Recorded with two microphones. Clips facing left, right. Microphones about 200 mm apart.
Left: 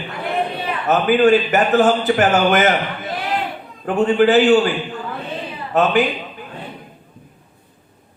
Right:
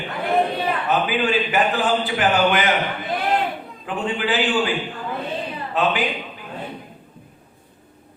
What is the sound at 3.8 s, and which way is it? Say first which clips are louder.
Speech: left 10 dB; 45° left (ahead or behind).